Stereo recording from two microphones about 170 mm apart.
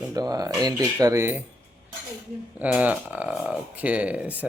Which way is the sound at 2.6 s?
10° right (ahead or behind).